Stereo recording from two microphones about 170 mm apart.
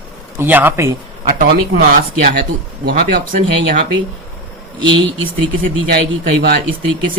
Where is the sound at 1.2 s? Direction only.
60° right (ahead or behind).